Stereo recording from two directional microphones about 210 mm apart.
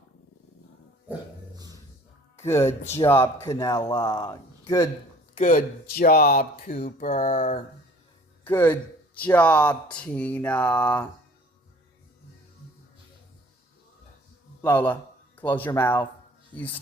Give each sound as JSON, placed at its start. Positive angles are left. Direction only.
{"t": 1.5, "sound": "dog", "side_deg": -20}
{"t": 2.3, "sound": "speech", "side_deg": 10}
{"t": 5.4, "sound": "speech", "side_deg": 40}
{"t": 8.4, "sound": "speech", "side_deg": 10}
{"t": 14.6, "sound": "speech", "side_deg": 10}